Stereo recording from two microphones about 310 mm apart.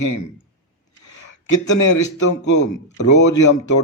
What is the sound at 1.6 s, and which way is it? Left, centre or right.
A man's voice, left.